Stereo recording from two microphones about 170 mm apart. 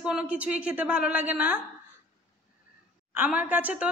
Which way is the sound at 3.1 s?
10° right (ahead or behind).